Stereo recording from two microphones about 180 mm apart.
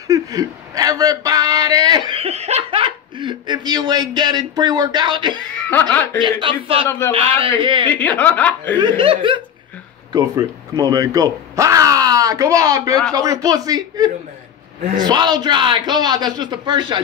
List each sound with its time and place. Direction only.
0.1 s speech: 20° right (ahead or behind)
5.7 s speech: 10° left (ahead or behind)
6.4 s a man's voice: 30° right (ahead or behind)
7.9 s speech: 10° left (ahead or behind)
8.7 s a man's voice: 30° right (ahead or behind)